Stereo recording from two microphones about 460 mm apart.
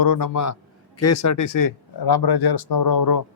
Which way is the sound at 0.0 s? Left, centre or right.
Left.